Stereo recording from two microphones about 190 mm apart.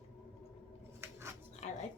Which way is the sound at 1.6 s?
35° left (ahead or behind).